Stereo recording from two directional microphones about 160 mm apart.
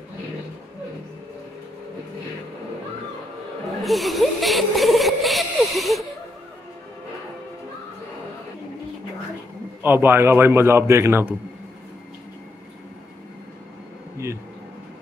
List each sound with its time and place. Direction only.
3.8 s speech: centre (ahead or behind)
9.8 s a man's voice: 15° right (ahead or behind)
14.1 s a sound: 20° right (ahead or behind)